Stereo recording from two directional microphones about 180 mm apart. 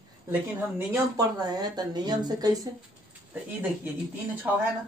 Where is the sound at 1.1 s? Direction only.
20° right (ahead or behind).